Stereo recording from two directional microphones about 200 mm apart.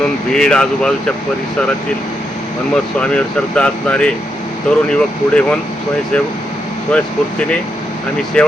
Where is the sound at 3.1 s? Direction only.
5° left (ahead or behind).